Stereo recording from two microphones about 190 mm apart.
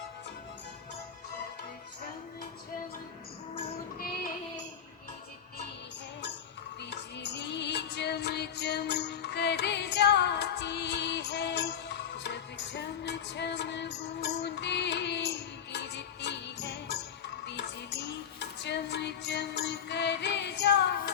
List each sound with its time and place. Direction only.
6.9 s music: 65° left (ahead or behind)